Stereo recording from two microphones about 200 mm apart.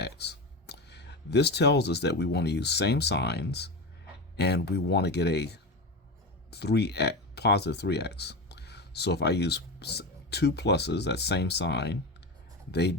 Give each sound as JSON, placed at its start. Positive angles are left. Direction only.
{"t": 0.0, "sound": "speech", "side_deg": 55}